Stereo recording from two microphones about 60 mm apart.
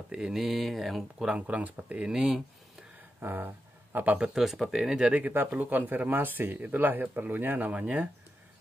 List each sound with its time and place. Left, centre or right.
0.1 s speech: centre
0.4 s speech: centre
1.2 s speech: right
2.0 s speech: centre
3.2 s speech: right
4.3 s speech: centre
4.9 s speech: right